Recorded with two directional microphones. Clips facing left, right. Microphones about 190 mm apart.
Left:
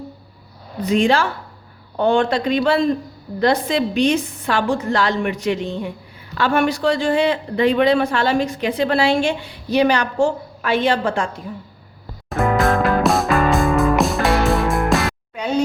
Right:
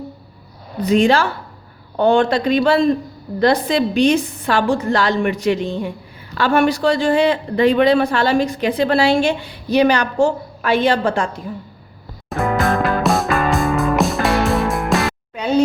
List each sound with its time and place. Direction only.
0.9 s speech: 40° right (ahead or behind)
12.3 s music: centre (ahead or behind)